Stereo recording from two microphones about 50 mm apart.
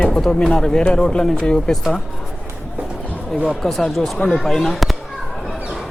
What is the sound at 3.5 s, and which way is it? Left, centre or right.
Speech, centre.